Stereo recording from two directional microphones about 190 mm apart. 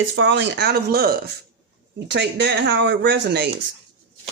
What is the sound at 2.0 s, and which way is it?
Speech, 65° right (ahead or behind).